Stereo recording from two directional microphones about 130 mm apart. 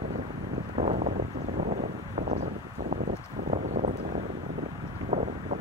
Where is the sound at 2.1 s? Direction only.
90° right.